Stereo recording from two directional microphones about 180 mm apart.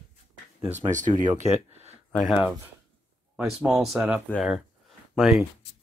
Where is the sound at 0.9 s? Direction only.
45° right (ahead or behind).